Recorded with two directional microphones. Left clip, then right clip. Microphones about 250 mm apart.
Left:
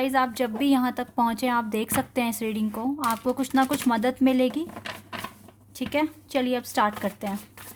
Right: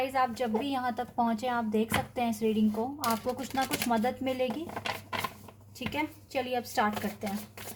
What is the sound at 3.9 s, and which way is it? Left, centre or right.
Speech, left.